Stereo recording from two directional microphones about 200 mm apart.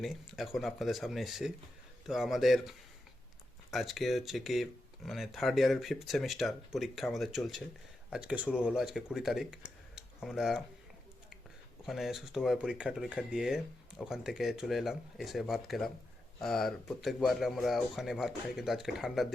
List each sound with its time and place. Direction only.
0.0 s speech: centre (ahead or behind)
11.9 s speech: centre (ahead or behind)